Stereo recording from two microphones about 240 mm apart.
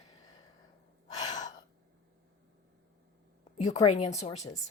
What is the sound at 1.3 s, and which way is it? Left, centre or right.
Gasp, left.